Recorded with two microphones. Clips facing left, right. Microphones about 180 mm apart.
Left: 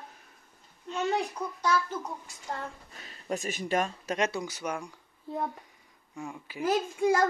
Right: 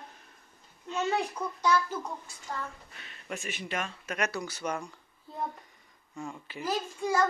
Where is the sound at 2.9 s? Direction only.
35° left (ahead or behind); by 4.9 s 10° left (ahead or behind).